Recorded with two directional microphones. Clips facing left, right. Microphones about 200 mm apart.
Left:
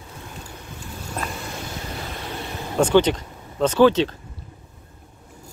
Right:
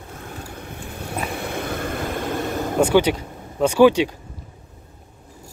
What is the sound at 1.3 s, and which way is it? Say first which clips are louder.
Vehicle: right 6 dB; 60° right (ahead or behind).